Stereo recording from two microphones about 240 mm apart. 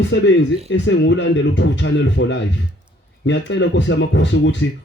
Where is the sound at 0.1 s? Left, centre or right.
Left.